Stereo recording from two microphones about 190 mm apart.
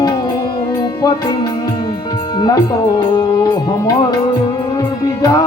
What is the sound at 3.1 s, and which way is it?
Music, 20° left (ahead or behind).